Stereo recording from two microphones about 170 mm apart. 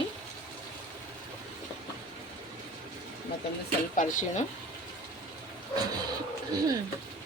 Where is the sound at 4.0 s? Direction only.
50° left (ahead or behind).